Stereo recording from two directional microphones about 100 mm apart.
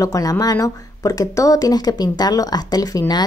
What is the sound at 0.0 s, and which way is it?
Speech, 35° left (ahead or behind).